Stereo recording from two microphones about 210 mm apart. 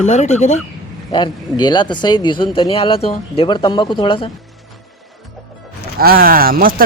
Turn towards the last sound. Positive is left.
turn(degrees=-40)  # may be behind; listen again after turning